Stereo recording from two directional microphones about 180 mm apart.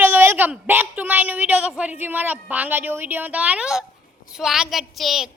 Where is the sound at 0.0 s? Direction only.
10° right (ahead or behind).